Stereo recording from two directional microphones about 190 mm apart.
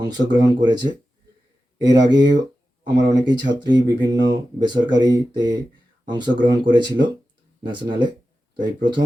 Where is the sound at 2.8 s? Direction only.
20° right (ahead or behind).